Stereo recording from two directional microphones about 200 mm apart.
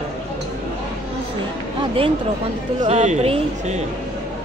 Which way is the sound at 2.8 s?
35° right (ahead or behind).